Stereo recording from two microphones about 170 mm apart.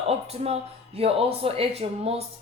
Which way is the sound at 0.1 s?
35° right (ahead or behind).